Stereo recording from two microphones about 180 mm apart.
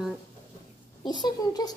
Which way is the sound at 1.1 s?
25° left (ahead or behind).